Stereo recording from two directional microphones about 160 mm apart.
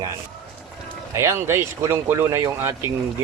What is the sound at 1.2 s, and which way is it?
Speech, 15° right (ahead or behind).